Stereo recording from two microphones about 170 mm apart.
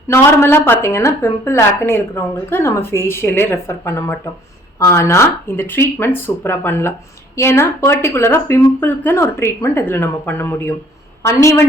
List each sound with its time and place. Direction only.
0.1 s speech: 15° left (ahead or behind)